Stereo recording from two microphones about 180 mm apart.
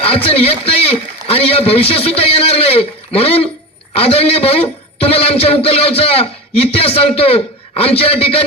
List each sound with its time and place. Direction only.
0.0 s a man's voice: 30° left (ahead or behind)